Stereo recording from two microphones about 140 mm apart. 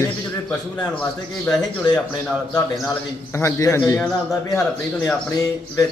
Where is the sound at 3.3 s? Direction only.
20° left (ahead or behind).